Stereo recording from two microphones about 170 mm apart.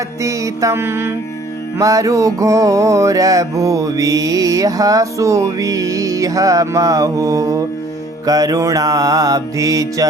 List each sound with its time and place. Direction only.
0.2 s mantra: 20° right (ahead or behind)